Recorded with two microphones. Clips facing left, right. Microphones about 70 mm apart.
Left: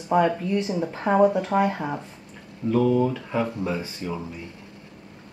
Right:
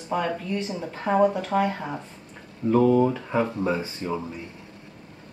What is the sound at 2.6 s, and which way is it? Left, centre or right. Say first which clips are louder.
Speech: right 2 dB; right.